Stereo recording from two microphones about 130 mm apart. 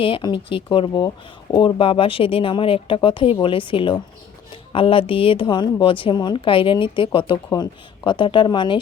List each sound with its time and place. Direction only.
0.0 s speech: 40° left (ahead or behind)